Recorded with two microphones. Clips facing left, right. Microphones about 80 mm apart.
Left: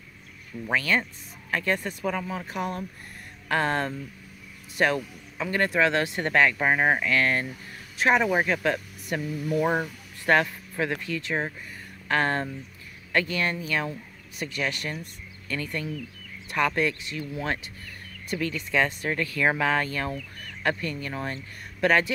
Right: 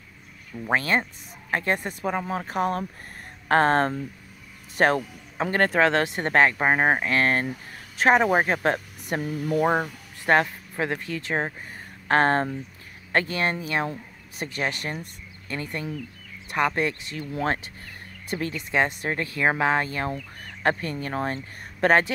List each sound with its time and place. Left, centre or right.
0.7 s speech: right
2.2 s speech: right
6.0 s speech: right
17.2 s speech: right
18.3 s speech: right